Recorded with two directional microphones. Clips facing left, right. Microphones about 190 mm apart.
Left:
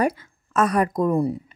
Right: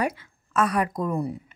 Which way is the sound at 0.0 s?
40° left (ahead or behind).